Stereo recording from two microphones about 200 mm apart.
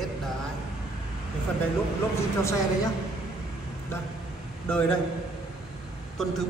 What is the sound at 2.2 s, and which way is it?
Speech, 15° left (ahead or behind).